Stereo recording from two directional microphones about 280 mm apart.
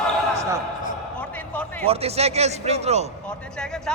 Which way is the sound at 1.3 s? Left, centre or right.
Centre.